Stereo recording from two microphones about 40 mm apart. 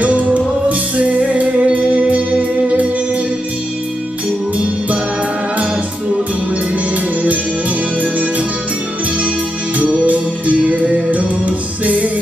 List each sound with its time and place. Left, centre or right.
0.0 s music: right
8.0 s music: right
9.8 s music: right